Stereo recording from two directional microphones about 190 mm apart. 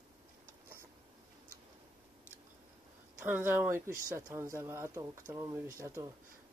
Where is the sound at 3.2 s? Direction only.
10° right (ahead or behind).